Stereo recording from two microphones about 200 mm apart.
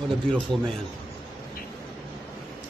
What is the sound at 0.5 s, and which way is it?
Speech, 25° right (ahead or behind).